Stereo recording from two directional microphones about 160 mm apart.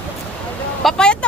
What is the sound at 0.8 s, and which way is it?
Speech, 5° left (ahead or behind).